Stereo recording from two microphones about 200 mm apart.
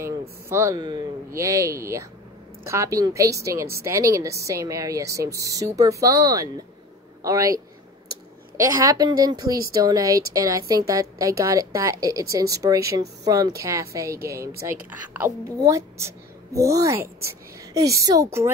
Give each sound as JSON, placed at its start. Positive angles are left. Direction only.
{"t": 0.5, "sound": "a woman's voice", "side_deg": -15}
{"t": 8.5, "sound": "a woman's voice", "side_deg": -15}